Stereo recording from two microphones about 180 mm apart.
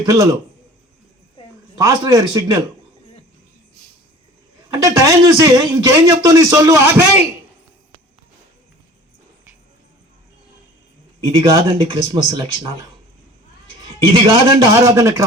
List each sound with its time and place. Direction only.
0.0 s speech: 20° right (ahead or behind)
1.8 s a man's voice: 20° right (ahead or behind)
4.7 s a man's voice: 20° right (ahead or behind)
11.3 s speech: 30° right (ahead or behind)
13.8 s a man's voice: 30° right (ahead or behind)
14.8 s speech: 15° right (ahead or behind)